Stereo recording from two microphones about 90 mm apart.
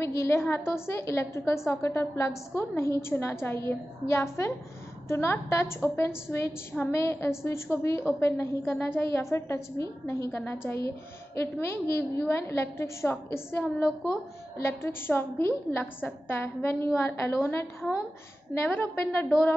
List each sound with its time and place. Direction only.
0.0 s a woman's voice: 30° left (ahead or behind)
18.7 s a woman's voice: 20° left (ahead or behind)